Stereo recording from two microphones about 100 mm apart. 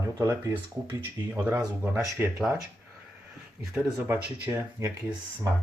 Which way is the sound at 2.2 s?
25° right (ahead or behind).